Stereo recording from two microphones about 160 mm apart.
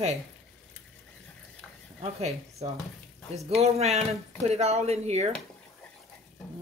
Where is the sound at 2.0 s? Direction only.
40° right (ahead or behind).